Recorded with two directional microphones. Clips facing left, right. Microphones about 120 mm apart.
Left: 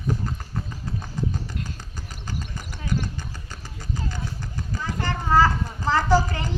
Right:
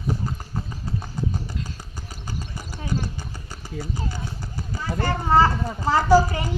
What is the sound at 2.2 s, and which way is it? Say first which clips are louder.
Clip-clop: even; 10° right (ahead or behind).